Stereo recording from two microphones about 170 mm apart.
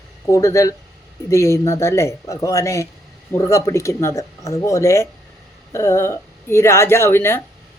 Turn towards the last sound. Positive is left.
turn(degrees=15)  # may be behind; listen again after turning